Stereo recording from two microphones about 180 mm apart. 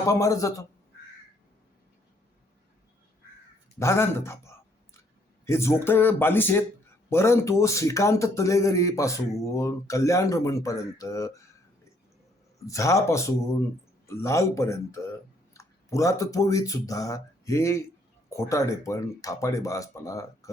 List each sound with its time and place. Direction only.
0.0 s a man's voice: 15° left (ahead or behind)
3.8 s a man's voice: 15° left (ahead or behind)
12.5 s a man's voice: 15° left (ahead or behind)